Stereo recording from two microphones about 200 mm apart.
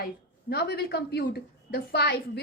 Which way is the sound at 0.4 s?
55° left (ahead or behind).